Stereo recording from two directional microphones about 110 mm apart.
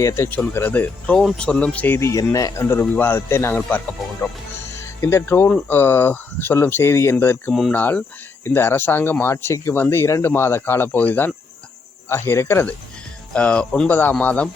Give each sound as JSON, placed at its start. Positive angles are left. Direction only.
{"t": 0.0, "sound": "speech", "side_deg": 30}
{"t": 13.3, "sound": "speech", "side_deg": 10}